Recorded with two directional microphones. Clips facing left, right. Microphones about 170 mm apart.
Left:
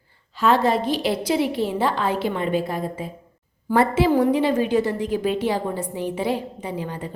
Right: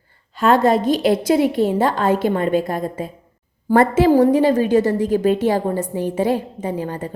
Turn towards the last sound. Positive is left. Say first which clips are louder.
# right 5 dB
turn(degrees=-45)  # may be behind; listen again after turning